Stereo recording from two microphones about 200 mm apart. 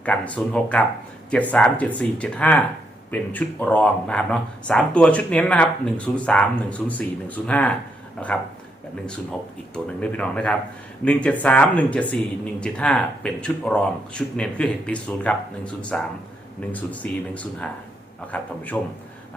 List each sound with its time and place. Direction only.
0.0 s speech: 5° left (ahead or behind)
9.7 s speech: 5° left (ahead or behind)